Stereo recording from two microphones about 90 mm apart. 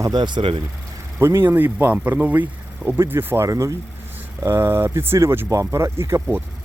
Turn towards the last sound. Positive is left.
turn(degrees=-30)  # may be behind; listen again after turning